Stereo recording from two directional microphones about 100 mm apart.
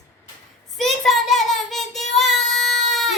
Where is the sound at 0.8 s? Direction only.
Centre (ahead or behind).